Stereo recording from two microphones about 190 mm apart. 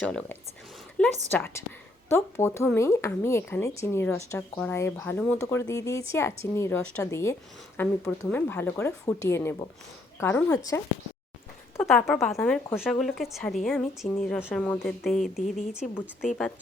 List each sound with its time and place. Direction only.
0.0 s a woman's voice: 5° left (ahead or behind)
11.8 s a woman's voice: 5° left (ahead or behind)